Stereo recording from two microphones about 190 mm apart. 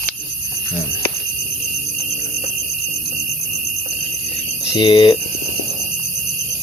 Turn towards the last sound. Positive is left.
turn(degrees=25)  # may be behind; listen again after turning